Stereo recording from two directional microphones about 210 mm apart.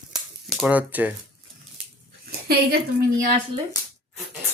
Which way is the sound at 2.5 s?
45° right (ahead or behind).